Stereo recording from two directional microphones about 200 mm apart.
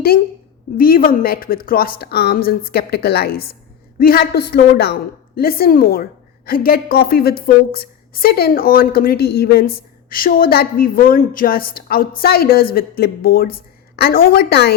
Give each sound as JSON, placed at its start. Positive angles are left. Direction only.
{"t": 0.8, "sound": "a woman's voice", "side_deg": 45}